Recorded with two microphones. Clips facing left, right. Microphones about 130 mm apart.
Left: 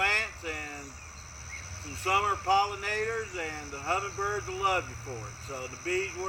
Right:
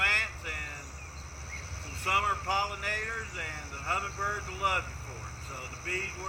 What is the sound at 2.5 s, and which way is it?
Speech, 20° left (ahead or behind).